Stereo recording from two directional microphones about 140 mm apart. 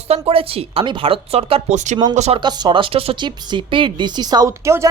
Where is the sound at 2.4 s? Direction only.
30° right (ahead or behind).